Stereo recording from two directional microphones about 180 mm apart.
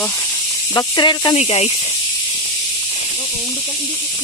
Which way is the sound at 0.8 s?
25° left (ahead or behind).